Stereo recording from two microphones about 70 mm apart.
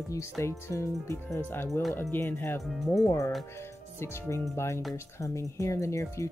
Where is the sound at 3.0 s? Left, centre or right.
Left.